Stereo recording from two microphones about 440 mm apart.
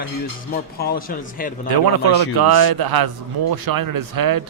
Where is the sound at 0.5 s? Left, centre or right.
Left.